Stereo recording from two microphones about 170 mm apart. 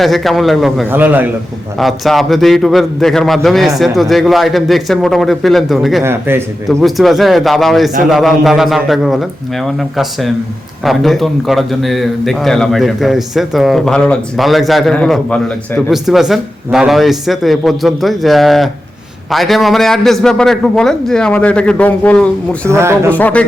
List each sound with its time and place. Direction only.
0.0 s a man's voice: centre (ahead or behind)
0.9 s speech: 10° right (ahead or behind)
1.8 s a man's voice: centre (ahead or behind)
6.0 s speech: 15° right (ahead or behind)
6.7 s a man's voice: centre (ahead or behind)
22.6 s speech: 15° right (ahead or behind)
23.1 s speech: 10° left (ahead or behind)